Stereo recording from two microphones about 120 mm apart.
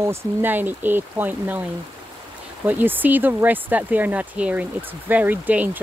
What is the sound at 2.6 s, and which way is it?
Speech, 15° right (ahead or behind).